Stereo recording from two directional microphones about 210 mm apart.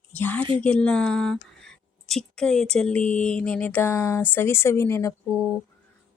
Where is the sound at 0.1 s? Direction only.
10° left (ahead or behind).